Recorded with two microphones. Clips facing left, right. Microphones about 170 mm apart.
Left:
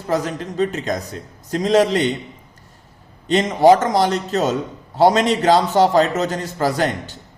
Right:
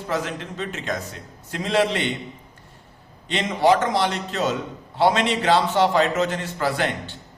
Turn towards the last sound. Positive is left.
turn(degrees=40)  # may be behind; listen again after turning